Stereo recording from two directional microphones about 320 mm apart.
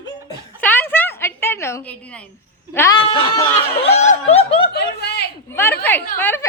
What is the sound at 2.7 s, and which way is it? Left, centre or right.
Speech, centre.